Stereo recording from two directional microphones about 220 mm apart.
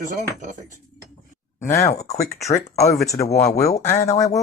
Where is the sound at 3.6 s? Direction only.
15° left (ahead or behind).